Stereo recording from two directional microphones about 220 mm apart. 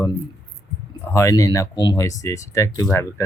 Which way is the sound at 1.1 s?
15° left (ahead or behind).